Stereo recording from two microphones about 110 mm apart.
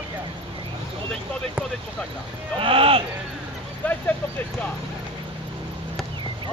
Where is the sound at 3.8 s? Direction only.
15° left (ahead or behind).